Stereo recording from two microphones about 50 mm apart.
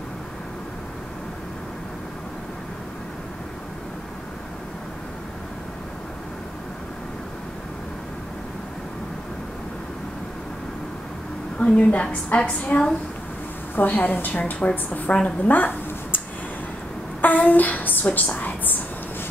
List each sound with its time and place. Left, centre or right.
11.5 s a woman's voice: left
15.4 s a sound: left
17.2 s a woman's voice: left